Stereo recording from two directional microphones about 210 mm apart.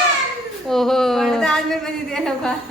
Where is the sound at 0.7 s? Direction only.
Centre (ahead or behind).